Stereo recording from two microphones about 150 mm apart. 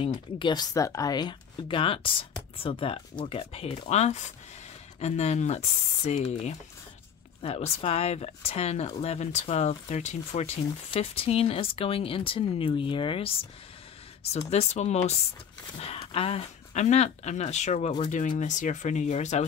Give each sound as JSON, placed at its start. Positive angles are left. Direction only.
{"t": 0.4, "sound": "speech", "side_deg": 30}
{"t": 14.5, "sound": "speech", "side_deg": 50}